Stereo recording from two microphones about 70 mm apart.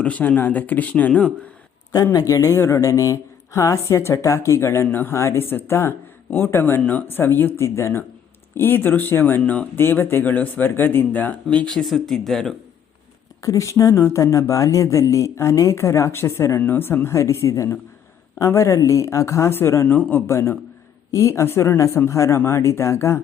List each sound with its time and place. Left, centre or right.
0.0 s speech: left
2.1 s a woman's voice: left
9.4 s speech: centre
9.7 s speech: left
11.4 s speech: centre
13.4 s a woman's voice: left
16.6 s speech: left
17.1 s a woman's voice: left
19.9 s a woman's voice: left